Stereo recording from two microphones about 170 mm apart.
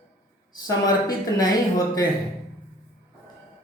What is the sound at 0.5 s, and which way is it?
Speech, 20° left (ahead or behind).